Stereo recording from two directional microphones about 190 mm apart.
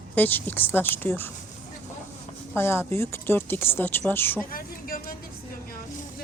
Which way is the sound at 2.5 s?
10° left (ahead or behind).